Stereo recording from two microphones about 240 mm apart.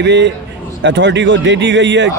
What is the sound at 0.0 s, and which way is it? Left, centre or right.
A man's voice, right.